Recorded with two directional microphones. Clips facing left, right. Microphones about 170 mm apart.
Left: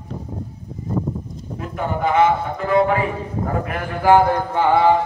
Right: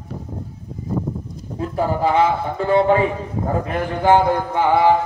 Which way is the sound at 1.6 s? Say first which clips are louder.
Right 4 dB; 30° right (ahead or behind).